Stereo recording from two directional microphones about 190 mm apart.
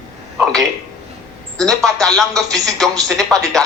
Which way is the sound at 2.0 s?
Centre (ahead or behind).